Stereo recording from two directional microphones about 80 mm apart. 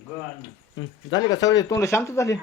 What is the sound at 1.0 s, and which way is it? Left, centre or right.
Speech, left.